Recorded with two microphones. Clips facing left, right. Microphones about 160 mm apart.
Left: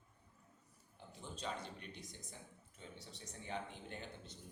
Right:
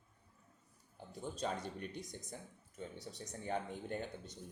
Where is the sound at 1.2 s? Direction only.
45° right (ahead or behind).